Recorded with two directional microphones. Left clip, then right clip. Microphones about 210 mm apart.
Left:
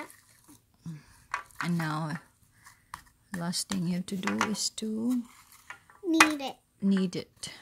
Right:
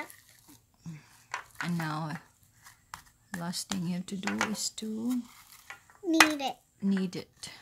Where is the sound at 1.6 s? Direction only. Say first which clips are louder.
Left 1 dB; 20° left (ahead or behind).